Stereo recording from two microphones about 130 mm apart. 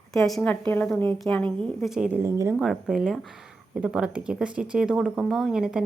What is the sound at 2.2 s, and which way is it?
Speech, 20° right (ahead or behind).